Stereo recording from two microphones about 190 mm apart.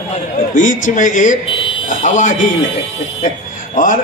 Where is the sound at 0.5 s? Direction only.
45° left (ahead or behind).